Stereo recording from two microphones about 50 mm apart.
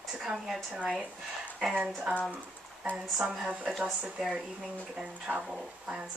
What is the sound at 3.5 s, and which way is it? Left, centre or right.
Speech, right.